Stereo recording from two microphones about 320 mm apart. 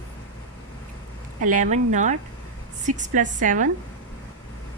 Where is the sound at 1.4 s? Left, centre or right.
Right.